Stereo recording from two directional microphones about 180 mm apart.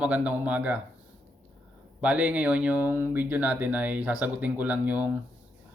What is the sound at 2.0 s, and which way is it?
Speech, 5° right (ahead or behind).